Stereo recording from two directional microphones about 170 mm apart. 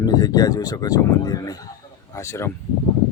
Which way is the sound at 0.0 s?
20° left (ahead or behind).